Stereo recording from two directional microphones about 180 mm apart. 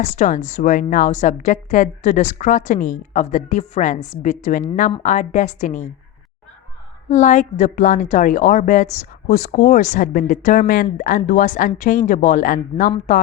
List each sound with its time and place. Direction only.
0.0 s a woman's voice: 45° left (ahead or behind)
7.1 s a woman's voice: 45° left (ahead or behind)